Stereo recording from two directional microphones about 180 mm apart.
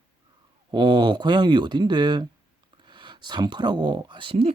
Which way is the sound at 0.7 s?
25° right (ahead or behind).